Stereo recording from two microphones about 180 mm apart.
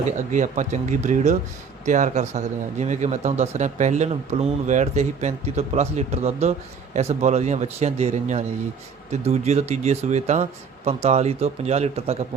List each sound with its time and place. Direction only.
0.3 s speech: 45° right (ahead or behind)